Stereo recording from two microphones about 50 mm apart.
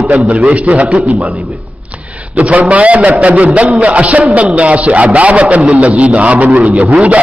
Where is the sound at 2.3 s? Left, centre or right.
Right.